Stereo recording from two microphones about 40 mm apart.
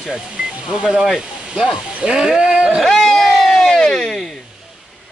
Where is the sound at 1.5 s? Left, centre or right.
Centre.